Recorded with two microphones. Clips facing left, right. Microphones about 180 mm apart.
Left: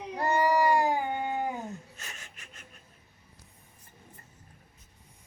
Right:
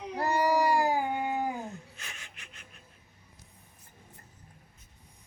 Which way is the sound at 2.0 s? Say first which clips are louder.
Left 1 dB; 40° left (ahead or behind).